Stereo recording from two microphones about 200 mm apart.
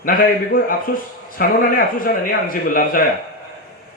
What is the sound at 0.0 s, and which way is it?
Speech, 45° left (ahead or behind).